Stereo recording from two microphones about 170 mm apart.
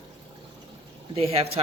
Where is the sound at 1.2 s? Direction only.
35° right (ahead or behind).